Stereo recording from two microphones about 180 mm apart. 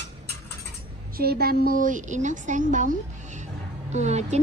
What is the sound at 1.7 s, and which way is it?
A woman's voice, 45° right (ahead or behind).